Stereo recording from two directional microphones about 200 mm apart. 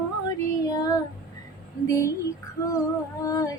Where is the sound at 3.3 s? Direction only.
15° left (ahead or behind).